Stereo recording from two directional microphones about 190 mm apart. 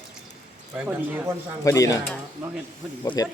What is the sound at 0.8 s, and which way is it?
Speech, 10° right (ahead or behind).